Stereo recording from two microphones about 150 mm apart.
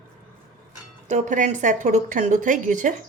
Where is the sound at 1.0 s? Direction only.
55° right (ahead or behind).